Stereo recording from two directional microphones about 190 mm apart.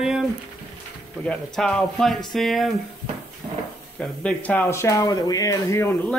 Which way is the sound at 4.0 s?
Centre (ahead or behind).